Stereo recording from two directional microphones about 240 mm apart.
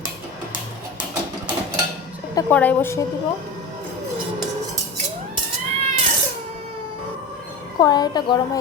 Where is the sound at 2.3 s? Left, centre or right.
Centre.